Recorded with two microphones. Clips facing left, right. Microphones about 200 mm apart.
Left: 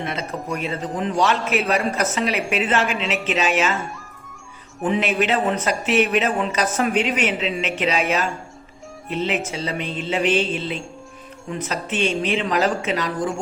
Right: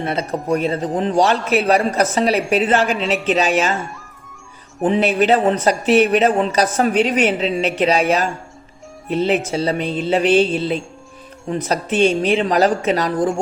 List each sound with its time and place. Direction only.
0.0 s a man's voice: 35° right (ahead or behind)
4.8 s a man's voice: 35° right (ahead or behind)
9.1 s a man's voice: 35° right (ahead or behind)